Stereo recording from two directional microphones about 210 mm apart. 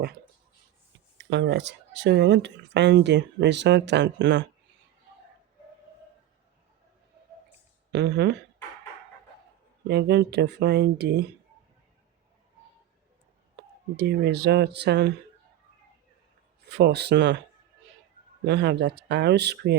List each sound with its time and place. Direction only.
1.2 s speech: 55° right (ahead or behind)
7.9 s speech: 55° right (ahead or behind)
9.8 s speech: 55° right (ahead or behind)
13.9 s speech: 50° right (ahead or behind)
16.7 s speech: 50° right (ahead or behind)
18.4 s speech: 55° right (ahead or behind)